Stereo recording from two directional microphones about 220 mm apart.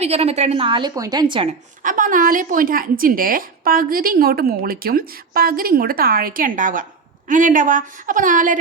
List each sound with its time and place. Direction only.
0.0 s a woman's voice: 30° right (ahead or behind)
1.8 s a woman's voice: 40° right (ahead or behind)